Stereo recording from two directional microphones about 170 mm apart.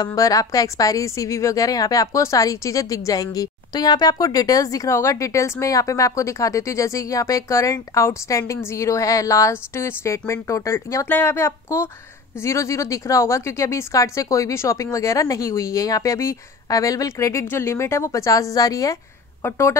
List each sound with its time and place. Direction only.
0.0 s a woman's voice: 20° left (ahead or behind)